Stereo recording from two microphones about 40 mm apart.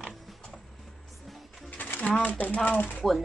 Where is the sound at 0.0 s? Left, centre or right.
Centre.